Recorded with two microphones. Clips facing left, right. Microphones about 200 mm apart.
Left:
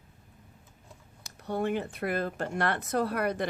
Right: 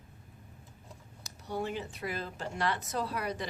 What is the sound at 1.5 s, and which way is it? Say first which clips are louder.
Speech: left 6 dB; 55° left (ahead or behind).